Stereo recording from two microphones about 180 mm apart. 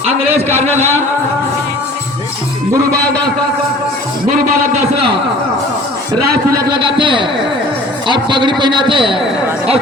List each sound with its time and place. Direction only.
6.5 s a man's voice: 55° right (ahead or behind)
6.7 s a man's voice: 25° right (ahead or behind)